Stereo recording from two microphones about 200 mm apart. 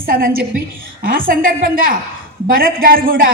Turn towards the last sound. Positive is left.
turn(degrees=-45)  # may be behind; listen again after turning